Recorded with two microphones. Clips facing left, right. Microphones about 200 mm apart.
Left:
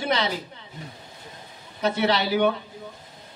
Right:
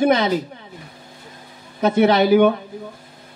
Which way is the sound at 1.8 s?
50° right (ahead or behind).